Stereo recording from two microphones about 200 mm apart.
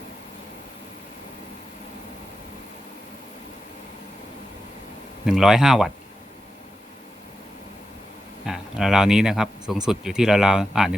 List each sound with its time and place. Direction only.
5.2 s speech: centre (ahead or behind)
8.4 s speech: centre (ahead or behind)